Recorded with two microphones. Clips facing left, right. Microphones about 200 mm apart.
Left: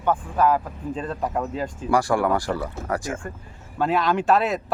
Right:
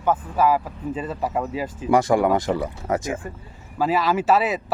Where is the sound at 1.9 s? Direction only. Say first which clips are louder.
Right 3 dB; 20° right (ahead or behind).